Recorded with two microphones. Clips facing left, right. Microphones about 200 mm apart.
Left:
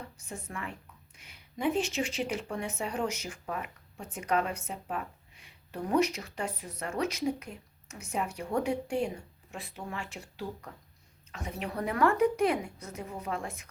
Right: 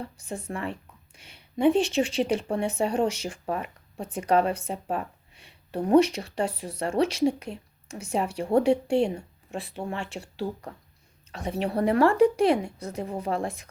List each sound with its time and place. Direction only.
0.3 s a woman's voice: 30° right (ahead or behind)